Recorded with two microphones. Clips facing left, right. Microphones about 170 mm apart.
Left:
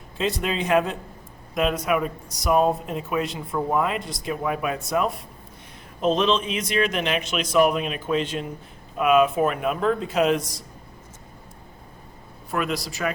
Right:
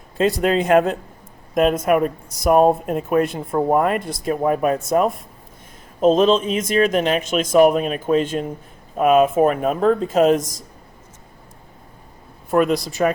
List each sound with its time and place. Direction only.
0.2 s speech: 45° right (ahead or behind)
12.5 s speech: 45° right (ahead or behind)